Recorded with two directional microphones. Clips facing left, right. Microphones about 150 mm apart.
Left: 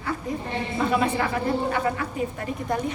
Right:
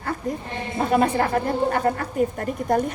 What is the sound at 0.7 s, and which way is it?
A woman's voice, 50° right (ahead or behind).